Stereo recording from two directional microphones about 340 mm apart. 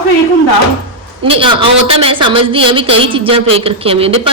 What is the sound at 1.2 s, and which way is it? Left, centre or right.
Speech, centre.